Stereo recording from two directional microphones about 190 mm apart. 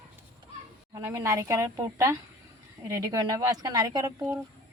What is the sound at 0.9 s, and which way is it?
A woman's voice, 15° right (ahead or behind).